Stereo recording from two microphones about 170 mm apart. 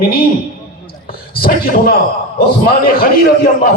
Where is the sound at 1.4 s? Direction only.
60° left (ahead or behind).